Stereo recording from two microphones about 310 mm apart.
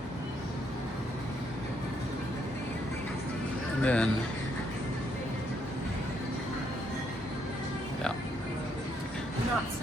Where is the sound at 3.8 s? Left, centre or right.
Centre.